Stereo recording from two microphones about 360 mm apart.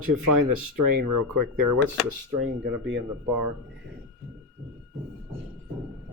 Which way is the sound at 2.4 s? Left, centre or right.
Right.